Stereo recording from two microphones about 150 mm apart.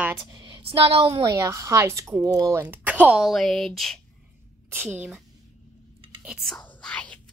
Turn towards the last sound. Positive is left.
turn(degrees=10)  # may be behind; listen again after turning